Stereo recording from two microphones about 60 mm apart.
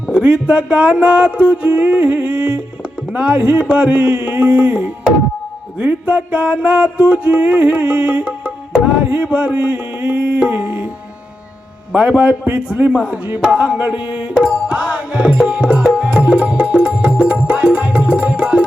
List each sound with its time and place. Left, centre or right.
0.1 s music: right
9.0 s a sound: right
11.9 s music: right